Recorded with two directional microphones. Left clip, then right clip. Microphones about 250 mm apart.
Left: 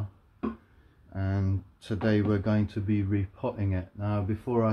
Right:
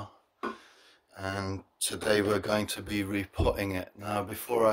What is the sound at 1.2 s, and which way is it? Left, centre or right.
Speech, right.